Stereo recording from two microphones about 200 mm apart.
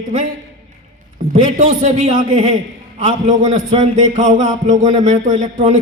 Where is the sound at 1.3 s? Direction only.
35° right (ahead or behind).